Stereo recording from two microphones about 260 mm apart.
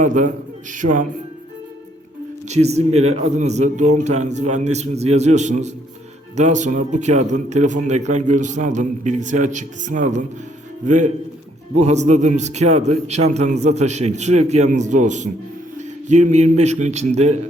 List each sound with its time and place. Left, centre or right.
0.0 s speech: right
2.5 s speech: right